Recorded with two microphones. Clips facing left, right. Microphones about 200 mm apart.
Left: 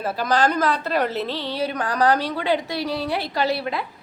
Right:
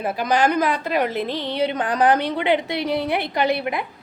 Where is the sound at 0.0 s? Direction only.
15° right (ahead or behind).